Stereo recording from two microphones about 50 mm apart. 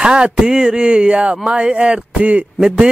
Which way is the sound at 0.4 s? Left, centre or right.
Centre.